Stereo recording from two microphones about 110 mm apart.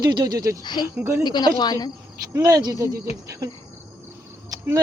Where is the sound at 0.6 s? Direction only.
40° left (ahead or behind).